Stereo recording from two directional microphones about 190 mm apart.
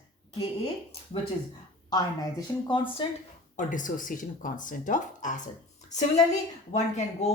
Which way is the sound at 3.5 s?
45° left (ahead or behind).